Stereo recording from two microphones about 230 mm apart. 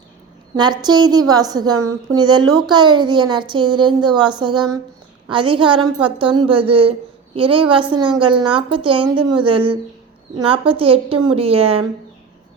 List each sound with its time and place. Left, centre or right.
0.5 s a woman's voice: centre